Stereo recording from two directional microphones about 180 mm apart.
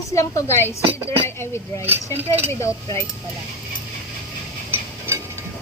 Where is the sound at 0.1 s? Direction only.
15° left (ahead or behind).